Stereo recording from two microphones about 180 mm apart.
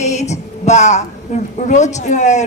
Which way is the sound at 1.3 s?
40° left (ahead or behind).